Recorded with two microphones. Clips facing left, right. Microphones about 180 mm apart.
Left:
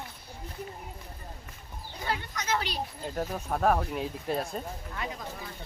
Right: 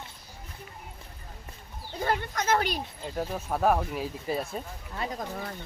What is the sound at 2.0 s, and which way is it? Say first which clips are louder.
Speech: right 6 dB; 50° right (ahead or behind).